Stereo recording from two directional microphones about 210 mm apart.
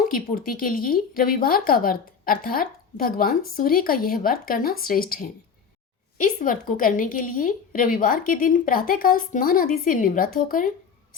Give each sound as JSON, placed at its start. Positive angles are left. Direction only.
{"t": 0.1, "sound": "a woman's voice", "side_deg": 40}